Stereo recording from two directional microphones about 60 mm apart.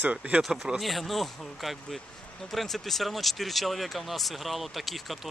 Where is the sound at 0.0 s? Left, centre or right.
Right.